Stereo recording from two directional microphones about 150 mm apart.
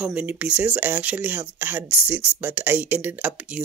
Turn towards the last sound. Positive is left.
turn(degrees=-10)  # may be behind; listen again after turning